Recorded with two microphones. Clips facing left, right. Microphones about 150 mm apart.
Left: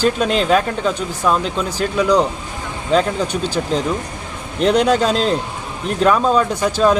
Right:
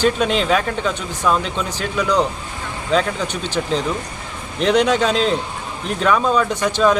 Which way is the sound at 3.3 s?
40° left (ahead or behind).